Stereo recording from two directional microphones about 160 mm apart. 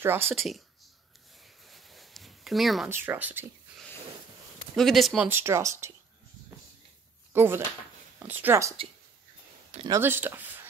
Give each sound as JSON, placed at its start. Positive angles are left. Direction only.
{"t": 0.0, "sound": "speech", "side_deg": -15}
{"t": 0.3, "sound": "speech", "side_deg": 0}
{"t": 1.7, "sound": "a sound", "side_deg": 0}
{"t": 2.9, "sound": "speech", "side_deg": -10}
{"t": 4.7, "sound": "speech", "side_deg": 0}
{"t": 5.3, "sound": "speech", "side_deg": -15}
{"t": 7.3, "sound": "speech", "side_deg": -15}
{"t": 9.8, "sound": "speech", "side_deg": -15}